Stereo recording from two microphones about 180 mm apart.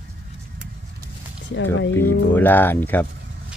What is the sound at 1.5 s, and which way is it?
Speech, 90° left.